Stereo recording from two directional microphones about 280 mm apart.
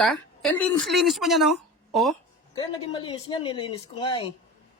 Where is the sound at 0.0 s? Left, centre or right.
Centre.